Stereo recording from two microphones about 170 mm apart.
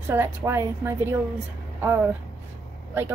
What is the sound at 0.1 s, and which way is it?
Speech, 15° right (ahead or behind).